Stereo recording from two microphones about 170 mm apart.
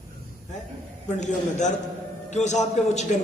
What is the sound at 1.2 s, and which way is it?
A man's voice, 45° left (ahead or behind).